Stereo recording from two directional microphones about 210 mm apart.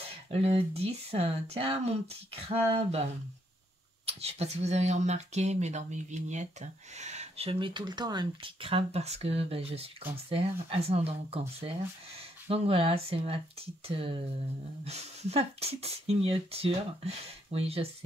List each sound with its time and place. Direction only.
0.1 s speech: 30° right (ahead or behind)